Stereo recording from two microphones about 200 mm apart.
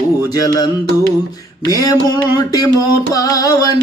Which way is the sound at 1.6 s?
15° left (ahead or behind).